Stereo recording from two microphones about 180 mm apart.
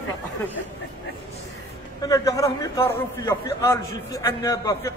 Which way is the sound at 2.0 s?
20° left (ahead or behind).